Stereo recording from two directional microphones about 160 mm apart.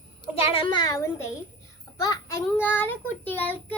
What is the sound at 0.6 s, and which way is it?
A child's voice, 25° left (ahead or behind).